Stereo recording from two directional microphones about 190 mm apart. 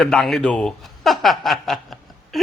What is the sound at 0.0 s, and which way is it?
A man's voice, centre (ahead or behind).